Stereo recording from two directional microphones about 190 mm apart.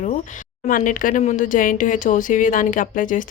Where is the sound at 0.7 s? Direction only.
45° left (ahead or behind).